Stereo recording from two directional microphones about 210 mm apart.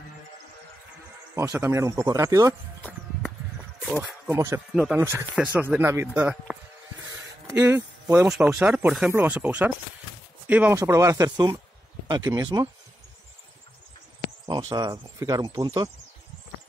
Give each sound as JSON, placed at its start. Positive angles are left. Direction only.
{"t": 1.3, "sound": "speech", "side_deg": -15}
{"t": 2.8, "sound": "a sound", "side_deg": 10}
{"t": 4.0, "sound": "speech", "side_deg": -10}
{"t": 7.1, "sound": "a sound", "side_deg": -15}
{"t": 8.5, "sound": "speech", "side_deg": -10}
{"t": 14.4, "sound": "speech", "side_deg": -15}